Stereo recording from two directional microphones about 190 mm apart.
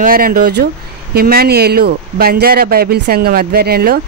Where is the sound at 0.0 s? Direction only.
50° right (ahead or behind).